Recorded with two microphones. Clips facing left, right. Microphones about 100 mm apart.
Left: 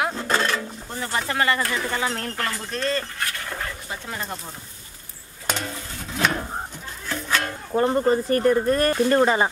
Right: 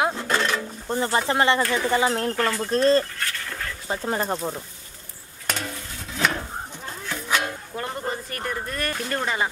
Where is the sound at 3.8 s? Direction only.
35° right (ahead or behind).